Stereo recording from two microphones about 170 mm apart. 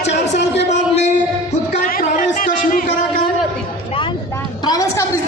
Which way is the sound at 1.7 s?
50° left (ahead or behind).